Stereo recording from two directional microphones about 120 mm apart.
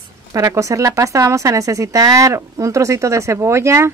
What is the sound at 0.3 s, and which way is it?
Speech, 30° right (ahead or behind).